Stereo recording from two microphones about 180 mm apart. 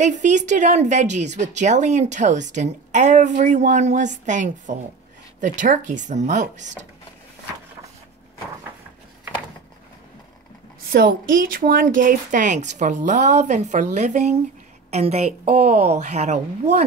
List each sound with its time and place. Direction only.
0.0 s a woman's voice: 40° right (ahead or behind)
10.9 s a woman's voice: 55° right (ahead or behind); by 16.8 s 40° right (ahead or behind)